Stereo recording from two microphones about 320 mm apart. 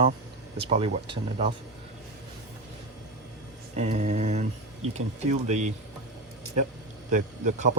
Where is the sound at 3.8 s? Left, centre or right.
Right.